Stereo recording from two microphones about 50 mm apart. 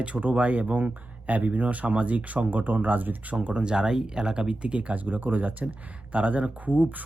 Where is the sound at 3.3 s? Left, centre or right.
Right.